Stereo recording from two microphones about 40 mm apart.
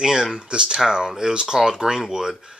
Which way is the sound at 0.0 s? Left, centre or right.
Centre.